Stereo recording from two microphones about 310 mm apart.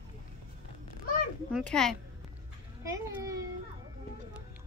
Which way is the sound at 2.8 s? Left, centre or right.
Centre.